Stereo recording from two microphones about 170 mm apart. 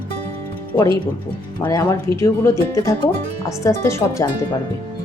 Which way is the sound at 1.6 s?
20° left (ahead or behind).